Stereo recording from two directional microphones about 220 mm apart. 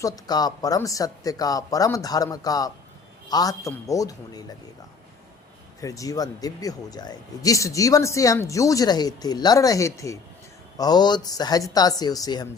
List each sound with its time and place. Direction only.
0.0 s speech: 15° left (ahead or behind)
5.8 s speech: 15° left (ahead or behind)